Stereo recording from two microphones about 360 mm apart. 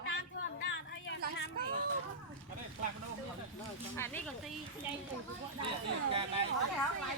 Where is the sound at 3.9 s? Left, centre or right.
Centre.